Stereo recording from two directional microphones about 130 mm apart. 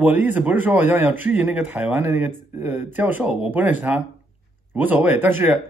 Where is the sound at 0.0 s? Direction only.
15° right (ahead or behind).